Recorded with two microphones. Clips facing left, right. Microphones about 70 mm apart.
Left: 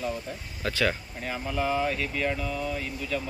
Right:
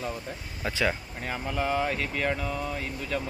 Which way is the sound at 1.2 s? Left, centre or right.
Right.